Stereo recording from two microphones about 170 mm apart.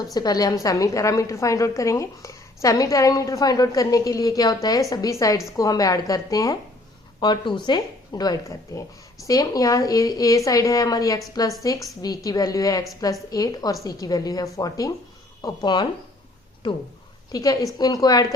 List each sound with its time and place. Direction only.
0.0 s a woman's voice: 25° left (ahead or behind)